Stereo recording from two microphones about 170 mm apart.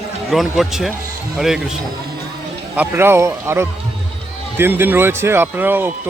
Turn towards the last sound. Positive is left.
turn(degrees=-10)  # may be behind; listen again after turning